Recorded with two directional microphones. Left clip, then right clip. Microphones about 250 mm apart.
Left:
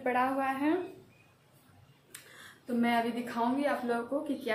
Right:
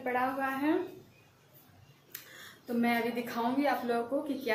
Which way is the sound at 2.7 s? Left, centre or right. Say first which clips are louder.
Left 1 dB; centre.